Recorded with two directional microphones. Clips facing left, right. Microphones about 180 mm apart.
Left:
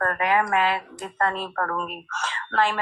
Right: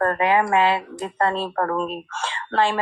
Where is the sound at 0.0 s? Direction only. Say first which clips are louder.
Right 4 dB; 25° right (ahead or behind).